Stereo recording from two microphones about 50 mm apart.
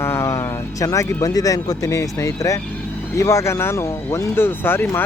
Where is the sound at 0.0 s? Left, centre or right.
Left.